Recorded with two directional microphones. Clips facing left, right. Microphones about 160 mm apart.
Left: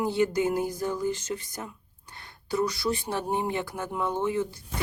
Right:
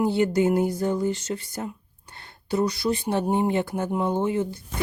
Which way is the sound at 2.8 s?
20° right (ahead or behind).